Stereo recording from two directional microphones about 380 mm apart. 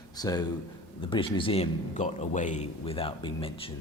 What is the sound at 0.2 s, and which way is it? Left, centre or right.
Speech, centre.